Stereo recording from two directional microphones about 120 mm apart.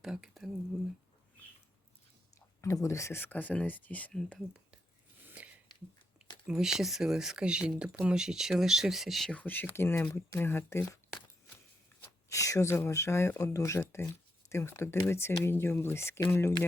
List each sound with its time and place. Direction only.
0.0 s speech: 5° right (ahead or behind)
2.6 s speech: 25° left (ahead or behind)
5.2 s a sound: 15° right (ahead or behind)
6.5 s speech: 5° right (ahead or behind); by 10.8 s 20° left (ahead or behind)
12.3 s speech: 25° left (ahead or behind)